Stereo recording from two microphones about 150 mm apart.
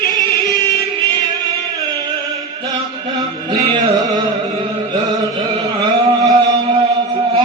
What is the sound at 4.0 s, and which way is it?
Carnatic music, 25° right (ahead or behind).